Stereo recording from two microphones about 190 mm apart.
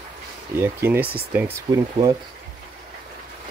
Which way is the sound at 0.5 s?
10° right (ahead or behind).